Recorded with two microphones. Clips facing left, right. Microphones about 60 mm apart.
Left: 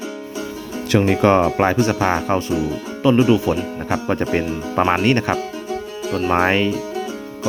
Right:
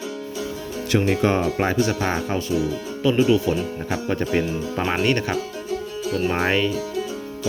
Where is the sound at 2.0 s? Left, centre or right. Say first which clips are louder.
Left 5 dB; left.